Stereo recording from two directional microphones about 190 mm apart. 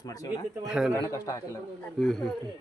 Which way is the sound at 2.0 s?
Centre (ahead or behind).